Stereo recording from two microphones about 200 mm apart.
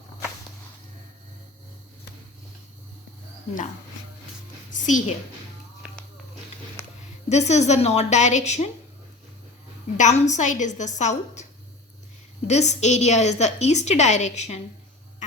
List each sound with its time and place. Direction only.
4.7 s a woman's voice: 40° left (ahead or behind)
7.3 s a woman's voice: 35° left (ahead or behind)
10.0 s a woman's voice: 35° left (ahead or behind)
12.5 s a woman's voice: 35° left (ahead or behind)